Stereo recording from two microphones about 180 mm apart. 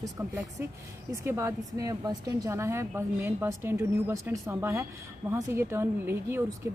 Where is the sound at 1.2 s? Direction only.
15° right (ahead or behind).